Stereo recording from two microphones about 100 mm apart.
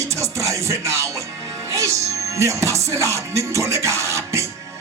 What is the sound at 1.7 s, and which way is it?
Speech, 30° right (ahead or behind).